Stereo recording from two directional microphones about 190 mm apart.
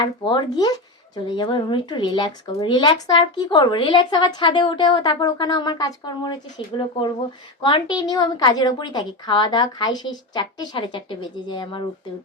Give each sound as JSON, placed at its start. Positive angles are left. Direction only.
{"t": 0.0, "sound": "speech", "side_deg": 25}